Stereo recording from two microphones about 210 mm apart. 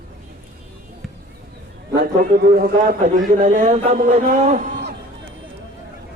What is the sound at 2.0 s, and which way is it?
A man's voice, 45° right (ahead or behind).